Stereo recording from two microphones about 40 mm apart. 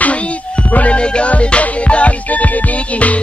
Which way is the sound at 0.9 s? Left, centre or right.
Left.